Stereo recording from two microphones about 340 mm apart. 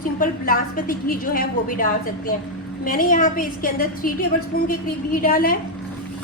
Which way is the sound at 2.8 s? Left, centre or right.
Left.